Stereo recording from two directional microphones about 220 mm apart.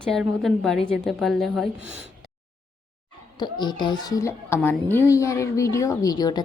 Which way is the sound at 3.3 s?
20° left (ahead or behind).